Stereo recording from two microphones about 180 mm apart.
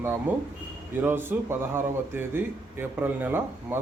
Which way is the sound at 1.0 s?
10° right (ahead or behind).